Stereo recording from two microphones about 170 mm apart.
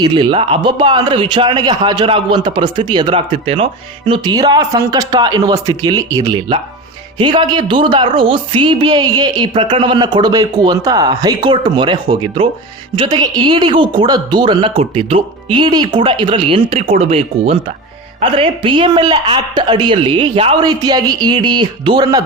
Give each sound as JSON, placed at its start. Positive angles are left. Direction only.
{"t": 0.0, "sound": "a man's voice", "side_deg": -30}